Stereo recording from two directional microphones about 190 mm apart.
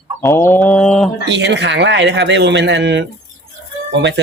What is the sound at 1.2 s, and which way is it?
A man's voice, 65° right (ahead or behind).